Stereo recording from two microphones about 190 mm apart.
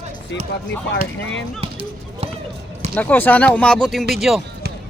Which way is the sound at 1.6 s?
30° right (ahead or behind).